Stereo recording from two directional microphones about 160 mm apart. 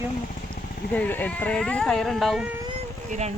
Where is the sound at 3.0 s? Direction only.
45° right (ahead or behind).